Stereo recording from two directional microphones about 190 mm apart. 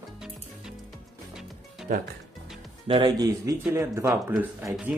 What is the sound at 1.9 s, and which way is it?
Speech, 45° right (ahead or behind).